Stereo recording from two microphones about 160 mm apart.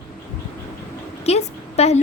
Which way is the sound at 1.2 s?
40° left (ahead or behind).